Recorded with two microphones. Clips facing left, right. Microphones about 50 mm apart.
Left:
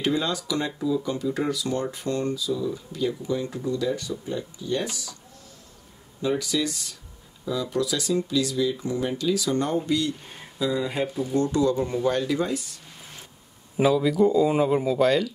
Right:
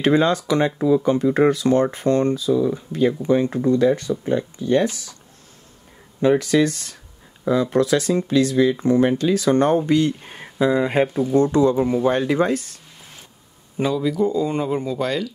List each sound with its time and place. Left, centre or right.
0.0 s speech: right
6.2 s speech: right
11.3 s speech: right
12.4 s speech: right
13.7 s a man's voice: centre